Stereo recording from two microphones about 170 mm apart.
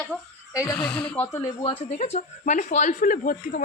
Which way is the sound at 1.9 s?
40° left (ahead or behind).